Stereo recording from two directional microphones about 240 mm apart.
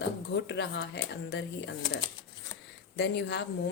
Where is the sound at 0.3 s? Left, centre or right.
Left.